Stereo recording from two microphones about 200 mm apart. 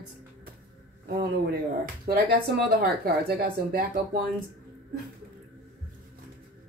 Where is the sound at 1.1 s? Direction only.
45° right (ahead or behind).